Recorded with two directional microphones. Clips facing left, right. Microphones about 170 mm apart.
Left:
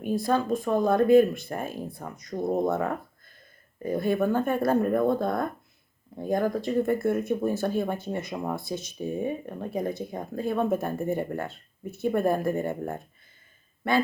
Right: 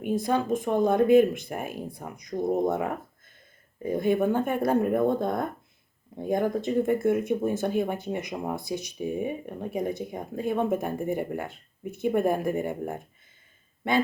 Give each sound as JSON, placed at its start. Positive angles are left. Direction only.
{"t": 0.0, "sound": "speech", "side_deg": -20}